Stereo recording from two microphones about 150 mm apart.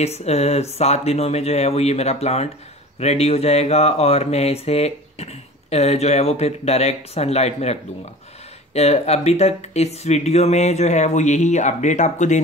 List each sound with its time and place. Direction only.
0.0 s mantra: 45° left (ahead or behind)